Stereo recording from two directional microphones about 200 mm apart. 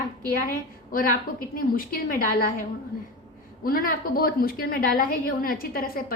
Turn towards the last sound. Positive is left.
turn(degrees=45)  # may be behind; listen again after turning